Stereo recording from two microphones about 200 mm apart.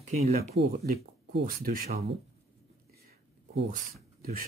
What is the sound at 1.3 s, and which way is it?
Speech, 45° right (ahead or behind).